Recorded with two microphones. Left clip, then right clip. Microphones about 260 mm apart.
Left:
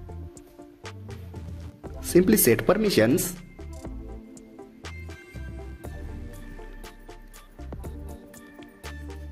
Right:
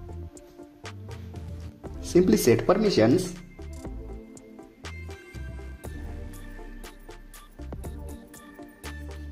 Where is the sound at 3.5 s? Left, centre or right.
Centre.